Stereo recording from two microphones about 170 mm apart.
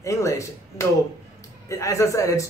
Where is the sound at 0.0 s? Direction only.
20° left (ahead or behind).